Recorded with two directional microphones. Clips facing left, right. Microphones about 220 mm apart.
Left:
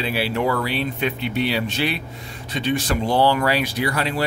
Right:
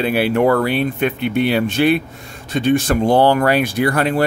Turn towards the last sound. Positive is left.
turn(degrees=-50)  # may be behind; listen again after turning